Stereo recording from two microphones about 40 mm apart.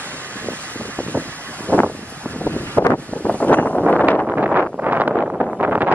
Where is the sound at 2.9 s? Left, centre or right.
Left.